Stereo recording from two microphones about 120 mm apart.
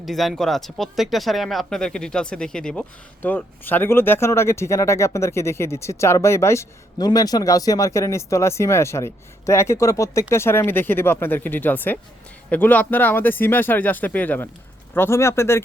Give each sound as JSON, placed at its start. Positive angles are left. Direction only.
{"t": 0.0, "sound": "speech", "side_deg": 0}